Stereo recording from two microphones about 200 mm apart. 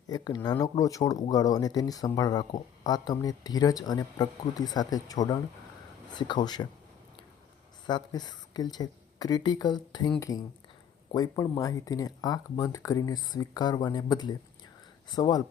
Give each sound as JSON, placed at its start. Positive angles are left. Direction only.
{"t": 0.1, "sound": "speech", "side_deg": 20}
{"t": 7.9, "sound": "speech", "side_deg": 20}